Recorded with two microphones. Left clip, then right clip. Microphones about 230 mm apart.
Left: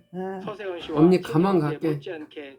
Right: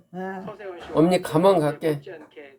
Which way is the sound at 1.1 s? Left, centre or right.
Right.